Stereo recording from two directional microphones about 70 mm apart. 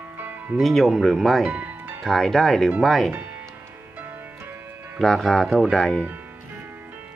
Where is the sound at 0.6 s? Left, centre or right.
Centre.